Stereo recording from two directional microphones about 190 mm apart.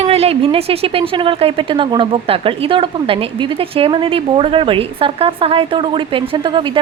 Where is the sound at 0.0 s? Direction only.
35° right (ahead or behind).